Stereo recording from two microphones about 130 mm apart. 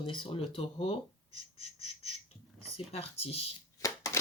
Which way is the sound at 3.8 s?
25° left (ahead or behind).